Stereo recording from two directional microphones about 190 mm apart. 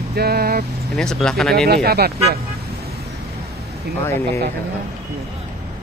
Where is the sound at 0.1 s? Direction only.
55° right (ahead or behind).